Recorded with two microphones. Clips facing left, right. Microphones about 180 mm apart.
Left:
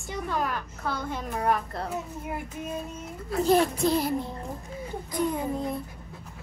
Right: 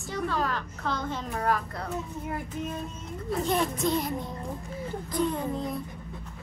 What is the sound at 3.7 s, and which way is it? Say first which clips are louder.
Music: left 2 dB; 30° left (ahead or behind).